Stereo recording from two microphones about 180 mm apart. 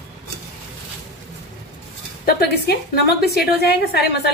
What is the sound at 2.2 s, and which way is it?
A woman's voice, 60° left (ahead or behind).